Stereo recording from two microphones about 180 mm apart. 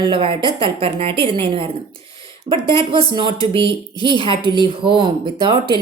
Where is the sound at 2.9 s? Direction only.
25° right (ahead or behind).